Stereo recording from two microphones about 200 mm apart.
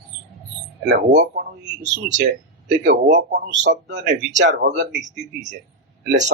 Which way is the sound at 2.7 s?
40° right (ahead or behind).